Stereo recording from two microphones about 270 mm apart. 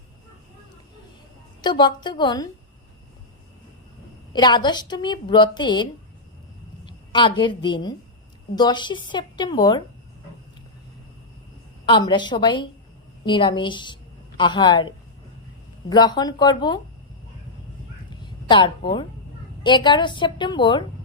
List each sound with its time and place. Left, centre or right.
1.6 s a woman's voice: centre
4.3 s a woman's voice: centre
11.9 s a woman's voice: centre
18.1 s a sound: centre
19.6 s a woman's voice: centre